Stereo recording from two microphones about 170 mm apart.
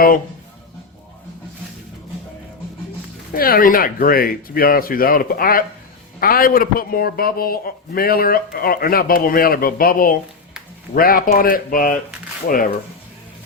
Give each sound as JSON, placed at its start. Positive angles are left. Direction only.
{"t": 3.3, "sound": "a man's voice", "side_deg": 60}